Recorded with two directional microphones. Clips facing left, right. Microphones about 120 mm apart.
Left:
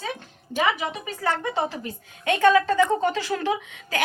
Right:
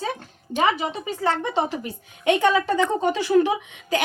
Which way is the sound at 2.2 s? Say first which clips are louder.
Even; 20° right (ahead or behind).